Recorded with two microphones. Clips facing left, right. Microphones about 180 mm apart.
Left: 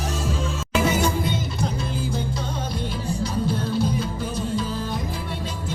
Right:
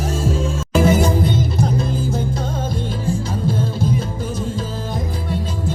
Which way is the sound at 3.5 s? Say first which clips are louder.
Right 4 dB; 50° right (ahead or behind).